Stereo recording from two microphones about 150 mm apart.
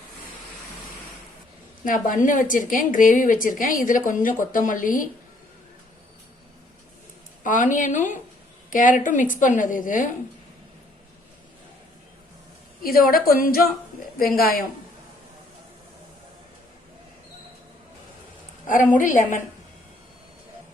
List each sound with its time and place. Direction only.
1.8 s a woman's voice: 65° left (ahead or behind)
7.4 s a woman's voice: 60° left (ahead or behind)
12.8 s a woman's voice: 75° left (ahead or behind)
18.7 s a woman's voice: 60° left (ahead or behind)